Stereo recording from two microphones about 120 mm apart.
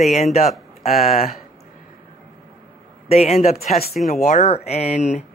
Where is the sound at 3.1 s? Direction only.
65° left (ahead or behind).